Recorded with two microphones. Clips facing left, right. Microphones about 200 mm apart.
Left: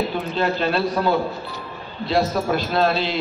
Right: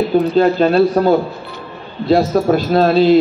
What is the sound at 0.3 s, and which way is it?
A man's voice, 40° right (ahead or behind).